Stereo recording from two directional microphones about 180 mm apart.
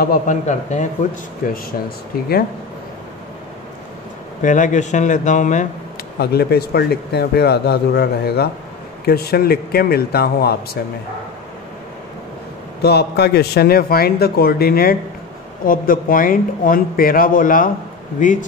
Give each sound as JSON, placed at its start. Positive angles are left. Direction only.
{"t": 0.0, "sound": "a man's voice", "side_deg": 45}
{"t": 4.4, "sound": "a man's voice", "side_deg": 45}
{"t": 6.1, "sound": "speech", "side_deg": 65}
{"t": 12.8, "sound": "a man's voice", "side_deg": 65}